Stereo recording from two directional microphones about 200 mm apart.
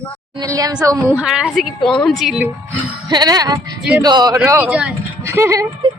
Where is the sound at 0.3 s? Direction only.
15° right (ahead or behind).